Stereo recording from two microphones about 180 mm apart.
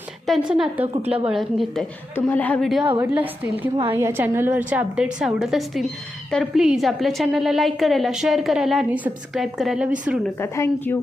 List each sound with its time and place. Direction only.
0.3 s a woman's voice: 5° right (ahead or behind)
1.0 s a woman's voice: 30° right (ahead or behind)
1.3 s a woman's voice: centre (ahead or behind)
10.3 s a woman's voice: 15° left (ahead or behind)